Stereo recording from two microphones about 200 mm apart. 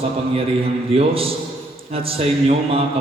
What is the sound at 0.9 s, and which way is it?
A man's voice, 30° right (ahead or behind).